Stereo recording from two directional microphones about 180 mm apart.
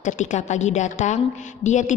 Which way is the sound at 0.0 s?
40° left (ahead or behind).